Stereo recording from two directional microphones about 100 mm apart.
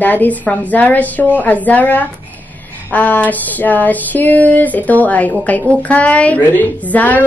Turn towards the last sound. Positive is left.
turn(degrees=15)  # may be behind; listen again after turning